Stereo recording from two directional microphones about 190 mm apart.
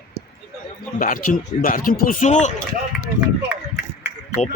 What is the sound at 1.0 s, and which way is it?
Speech, 45° left (ahead or behind).